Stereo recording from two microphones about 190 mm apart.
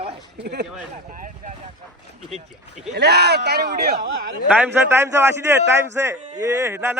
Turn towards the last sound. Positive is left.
turn(degrees=-10)  # may be behind; listen again after turning